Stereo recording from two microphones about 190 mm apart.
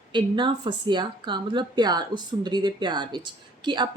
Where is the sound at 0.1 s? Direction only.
25° right (ahead or behind).